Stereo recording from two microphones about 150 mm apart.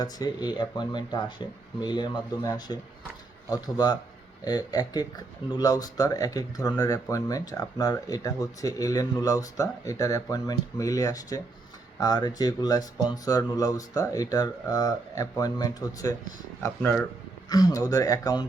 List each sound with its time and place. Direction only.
0.0 s speech: 25° left (ahead or behind)
16.8 s speech: 10° left (ahead or behind)
17.5 s speech: 25° left (ahead or behind)